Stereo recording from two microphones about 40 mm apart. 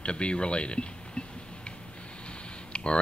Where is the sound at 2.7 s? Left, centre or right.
Left.